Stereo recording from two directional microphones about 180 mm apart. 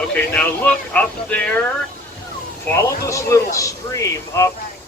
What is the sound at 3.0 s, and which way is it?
Speech, 15° left (ahead or behind).